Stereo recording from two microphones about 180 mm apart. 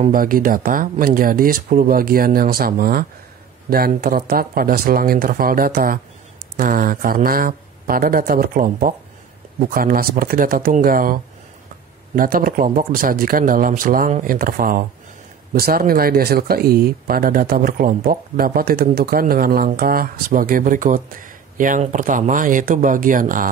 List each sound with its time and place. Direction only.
0.1 s speech: 50° right (ahead or behind)
12.2 s speech: 50° right (ahead or behind)